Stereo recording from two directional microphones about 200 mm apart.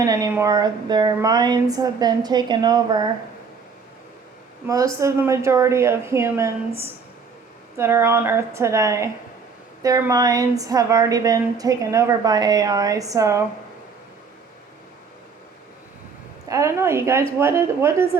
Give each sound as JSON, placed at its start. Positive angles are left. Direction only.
{"t": 0.0, "sound": "speech", "side_deg": -15}
{"t": 4.6, "sound": "a woman's voice", "side_deg": -15}
{"t": 16.5, "sound": "a woman's voice", "side_deg": -15}